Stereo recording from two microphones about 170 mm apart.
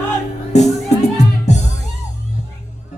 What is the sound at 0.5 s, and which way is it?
Music, 40° left (ahead or behind).